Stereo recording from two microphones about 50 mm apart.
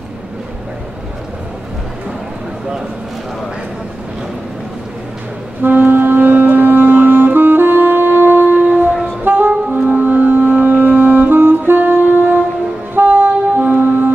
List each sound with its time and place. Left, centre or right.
5.6 s music: right
8.6 s music: right
9.2 s music: right
12.9 s wind instrument: right